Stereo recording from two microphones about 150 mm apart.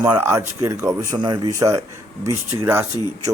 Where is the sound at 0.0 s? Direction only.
15° right (ahead or behind).